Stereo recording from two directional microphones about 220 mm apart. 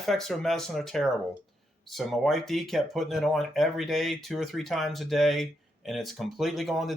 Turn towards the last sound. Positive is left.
turn(degrees=0)  # may be behind; listen again after turning